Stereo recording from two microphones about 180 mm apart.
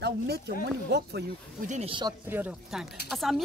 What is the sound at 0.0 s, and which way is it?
Speech, 65° right (ahead or behind).